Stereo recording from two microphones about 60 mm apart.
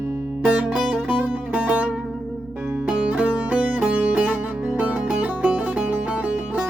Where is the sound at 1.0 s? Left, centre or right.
Right.